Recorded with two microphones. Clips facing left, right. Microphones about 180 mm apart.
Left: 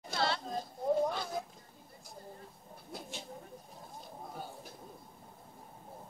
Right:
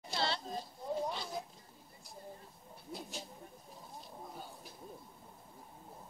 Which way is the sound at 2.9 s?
Centre (ahead or behind).